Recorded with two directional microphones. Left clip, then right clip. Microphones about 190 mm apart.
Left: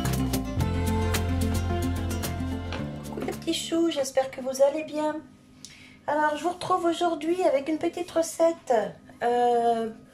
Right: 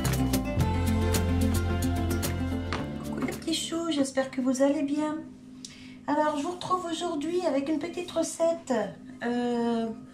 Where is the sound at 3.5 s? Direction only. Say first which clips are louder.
Left 5 dB; 30° left (ahead or behind).